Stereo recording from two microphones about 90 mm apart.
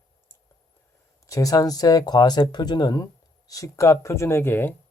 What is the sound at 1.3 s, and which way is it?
Speech, 40° left (ahead or behind).